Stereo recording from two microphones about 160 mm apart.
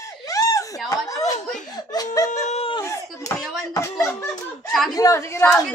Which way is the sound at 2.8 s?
20° left (ahead or behind).